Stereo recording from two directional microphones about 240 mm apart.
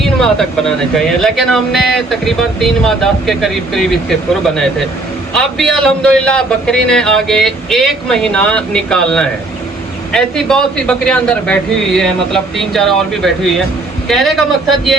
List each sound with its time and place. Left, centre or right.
0.0 s a man's voice: centre